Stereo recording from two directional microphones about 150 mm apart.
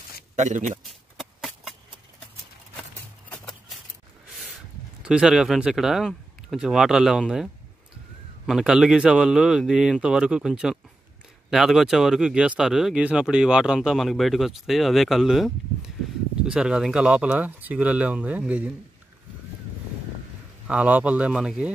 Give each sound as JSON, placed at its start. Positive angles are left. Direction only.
{"t": 0.4, "sound": "a man's voice", "side_deg": -55}
{"t": 5.0, "sound": "speech", "side_deg": -5}
{"t": 8.5, "sound": "speech", "side_deg": -5}
{"t": 20.6, "sound": "speech", "side_deg": -10}